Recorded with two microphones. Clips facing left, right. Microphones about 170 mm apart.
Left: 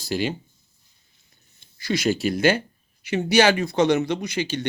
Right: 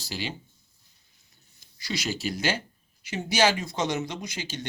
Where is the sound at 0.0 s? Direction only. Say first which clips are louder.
Left 9 dB; 50° left (ahead or behind).